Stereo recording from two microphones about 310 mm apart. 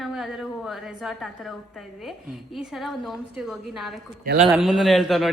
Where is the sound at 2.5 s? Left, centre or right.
Centre.